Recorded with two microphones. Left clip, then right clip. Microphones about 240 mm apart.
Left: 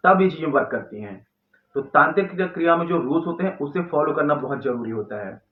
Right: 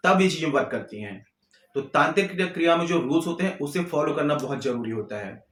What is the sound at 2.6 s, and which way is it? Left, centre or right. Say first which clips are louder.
Speech: left 2 dB; right.